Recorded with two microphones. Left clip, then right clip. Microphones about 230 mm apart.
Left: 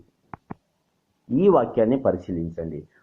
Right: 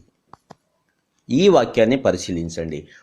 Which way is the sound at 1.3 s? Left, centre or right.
Right.